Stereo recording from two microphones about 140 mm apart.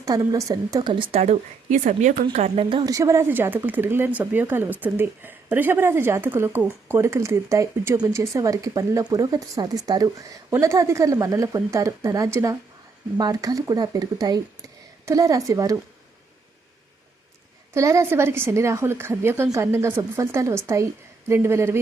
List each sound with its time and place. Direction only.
0.0 s speech: 25° right (ahead or behind)
1.2 s speech: 60° right (ahead or behind)
2.8 s speech: 20° right (ahead or behind)
17.7 s speech: 20° right (ahead or behind)